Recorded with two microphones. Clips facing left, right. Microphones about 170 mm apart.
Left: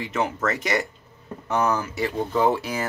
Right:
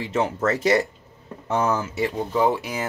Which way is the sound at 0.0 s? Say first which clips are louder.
Right 2 dB; 30° right (ahead or behind).